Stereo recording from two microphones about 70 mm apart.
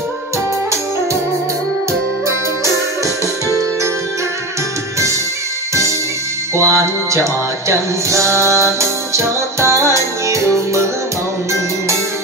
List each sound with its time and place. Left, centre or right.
6.5 s music: right